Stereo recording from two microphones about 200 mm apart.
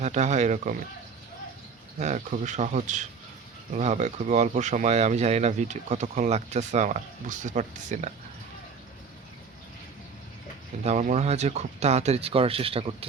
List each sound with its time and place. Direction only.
0.0 s speech: 35° right (ahead or behind)
2.0 s speech: 35° right (ahead or behind)
10.8 s speech: 35° right (ahead or behind)